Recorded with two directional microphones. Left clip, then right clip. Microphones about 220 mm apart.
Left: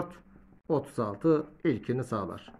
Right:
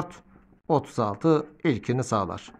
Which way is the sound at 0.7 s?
40° right (ahead or behind).